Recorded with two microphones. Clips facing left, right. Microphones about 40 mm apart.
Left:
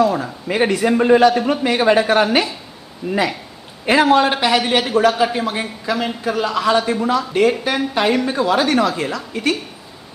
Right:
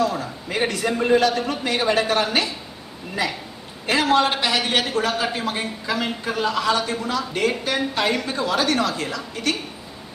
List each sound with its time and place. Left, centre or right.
0.0 s a man's voice: centre
3.8 s a man's voice: left